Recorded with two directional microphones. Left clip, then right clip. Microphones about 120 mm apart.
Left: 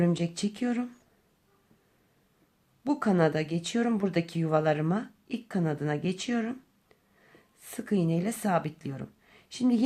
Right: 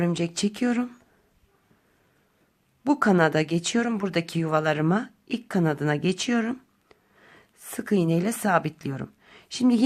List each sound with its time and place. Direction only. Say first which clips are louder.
0.0 s speech: right 3 dB; 30° right (ahead or behind)
2.8 s speech: right 5 dB; 35° right (ahead or behind)